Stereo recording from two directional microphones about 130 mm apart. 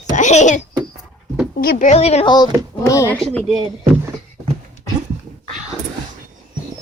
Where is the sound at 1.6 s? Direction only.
80° left.